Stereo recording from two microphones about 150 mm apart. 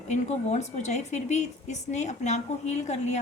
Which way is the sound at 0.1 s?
50° left (ahead or behind).